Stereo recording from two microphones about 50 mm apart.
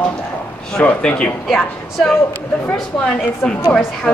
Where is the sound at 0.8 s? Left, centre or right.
Left.